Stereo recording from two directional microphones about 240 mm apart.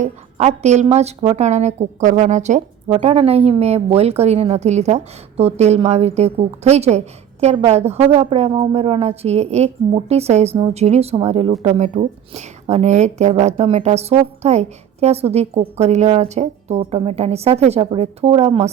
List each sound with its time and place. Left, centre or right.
0.0 s a woman's voice: right